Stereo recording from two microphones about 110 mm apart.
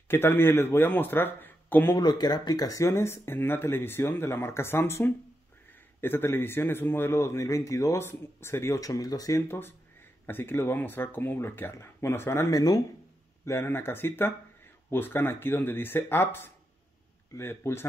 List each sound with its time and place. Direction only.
0.1 s speech: 20° left (ahead or behind)
2.0 s speech: 40° left (ahead or behind)
9.5 s speech: 20° left (ahead or behind)
13.5 s speech: 20° left (ahead or behind)